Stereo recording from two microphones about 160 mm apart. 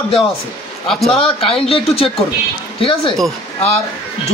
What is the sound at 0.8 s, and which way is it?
Speech, centre (ahead or behind).